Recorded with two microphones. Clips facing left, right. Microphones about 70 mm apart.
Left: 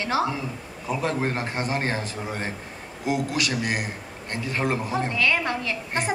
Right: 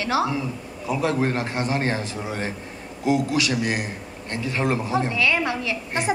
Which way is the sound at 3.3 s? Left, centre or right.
Left.